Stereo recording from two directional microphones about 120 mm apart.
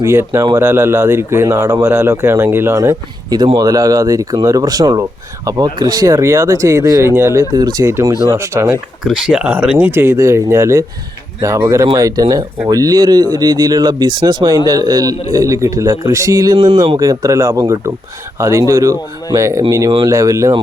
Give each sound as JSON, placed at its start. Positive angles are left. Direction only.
{"t": 0.0, "sound": "speech", "side_deg": -20}
{"t": 3.2, "sound": "speech", "side_deg": -35}
{"t": 9.0, "sound": "speech", "side_deg": -5}
{"t": 16.6, "sound": "speech", "side_deg": -40}
{"t": 17.0, "sound": "speech", "side_deg": -25}